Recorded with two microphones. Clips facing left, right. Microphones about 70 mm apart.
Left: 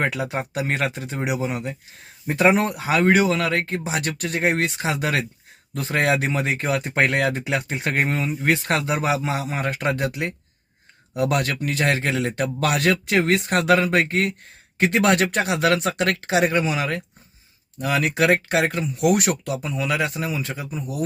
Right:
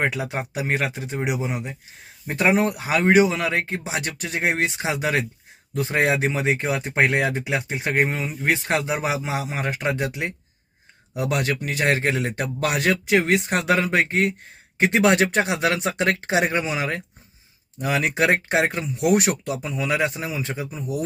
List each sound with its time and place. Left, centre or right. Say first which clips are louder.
0.0 s a man's voice: left 1 dB; centre
3.1 s a man's voice: right 3 dB; centre